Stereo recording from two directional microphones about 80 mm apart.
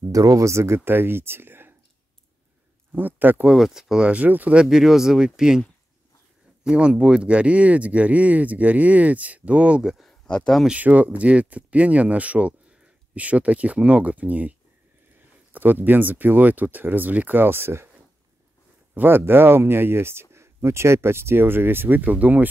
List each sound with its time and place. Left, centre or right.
0.1 s speech: right
2.9 s speech: right
3.4 s speech: centre
4.6 s speech: centre
6.6 s speech: centre
9.9 s a sound: centre
10.3 s speech: centre
10.7 s speech: centre
15.5 s speech: right
18.9 s speech: right